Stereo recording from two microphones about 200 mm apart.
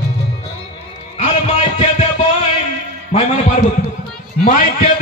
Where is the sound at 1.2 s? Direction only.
30° left (ahead or behind).